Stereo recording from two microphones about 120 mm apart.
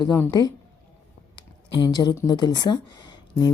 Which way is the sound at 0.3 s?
35° left (ahead or behind).